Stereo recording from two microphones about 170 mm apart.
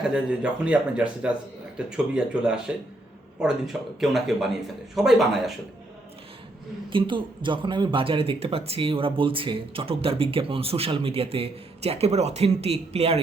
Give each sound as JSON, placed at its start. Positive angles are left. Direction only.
{"t": 0.1, "sound": "speech", "side_deg": -5}
{"t": 6.9, "sound": "a man's voice", "side_deg": -30}